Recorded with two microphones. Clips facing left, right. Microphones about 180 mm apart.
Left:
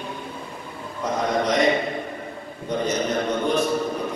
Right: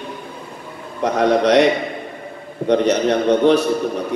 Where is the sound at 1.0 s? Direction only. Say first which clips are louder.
Right 8 dB; 70° right (ahead or behind).